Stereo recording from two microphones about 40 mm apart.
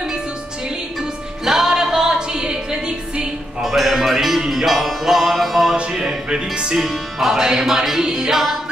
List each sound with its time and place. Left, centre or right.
1.4 s music: centre
3.6 s music: centre
5.8 s music: right
6.8 s music: centre